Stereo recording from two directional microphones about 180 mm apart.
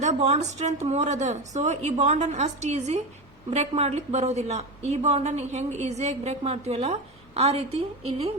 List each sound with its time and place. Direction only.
0.0 s a woman's voice: 40° right (ahead or behind)